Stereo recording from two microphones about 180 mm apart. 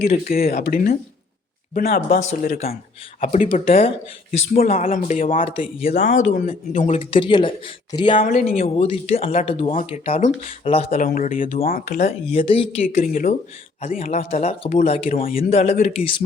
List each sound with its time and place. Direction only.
0.3 s speech: 55° left (ahead or behind); by 3.9 s 35° left (ahead or behind)
4.3 s speech: 55° left (ahead or behind)
5.5 s speech: 35° left (ahead or behind)
8.2 s speech: 50° left (ahead or behind)
8.6 s speech: 35° left (ahead or behind)
9.7 s speech: 40° left (ahead or behind)